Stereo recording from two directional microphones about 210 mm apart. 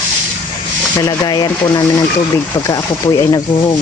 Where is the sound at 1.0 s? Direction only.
20° left (ahead or behind).